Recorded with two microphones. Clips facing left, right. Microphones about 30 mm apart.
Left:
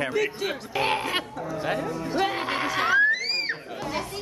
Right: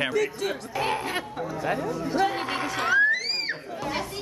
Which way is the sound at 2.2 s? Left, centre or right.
Centre.